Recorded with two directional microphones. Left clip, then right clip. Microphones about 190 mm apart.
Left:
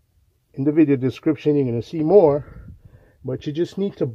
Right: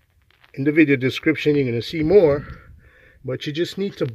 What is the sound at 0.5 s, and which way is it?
Speech, 10° left (ahead or behind).